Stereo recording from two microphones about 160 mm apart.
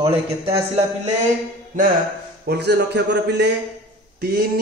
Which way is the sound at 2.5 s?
90° right.